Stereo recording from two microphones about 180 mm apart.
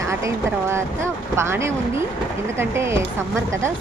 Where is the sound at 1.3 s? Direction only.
15° right (ahead or behind).